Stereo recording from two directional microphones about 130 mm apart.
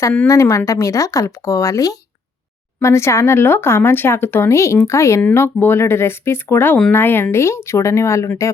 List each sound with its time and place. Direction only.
0.3 s speech: 25° left (ahead or behind)